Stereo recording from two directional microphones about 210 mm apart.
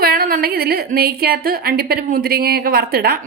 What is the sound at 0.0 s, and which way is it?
A woman's voice, 45° right (ahead or behind).